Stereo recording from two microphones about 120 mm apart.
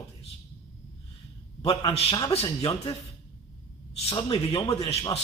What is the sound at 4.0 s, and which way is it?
Speech, 50° left (ahead or behind).